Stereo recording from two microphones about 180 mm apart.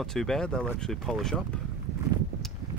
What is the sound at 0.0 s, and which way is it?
Speech, centre (ahead or behind).